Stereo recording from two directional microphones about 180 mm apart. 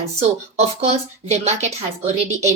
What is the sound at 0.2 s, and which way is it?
A woman's voice, 35° right (ahead or behind).